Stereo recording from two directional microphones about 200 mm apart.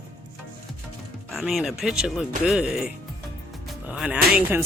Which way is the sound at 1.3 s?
Centre (ahead or behind).